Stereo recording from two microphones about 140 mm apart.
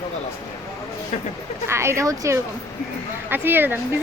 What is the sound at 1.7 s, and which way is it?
A woman's voice, 20° right (ahead or behind).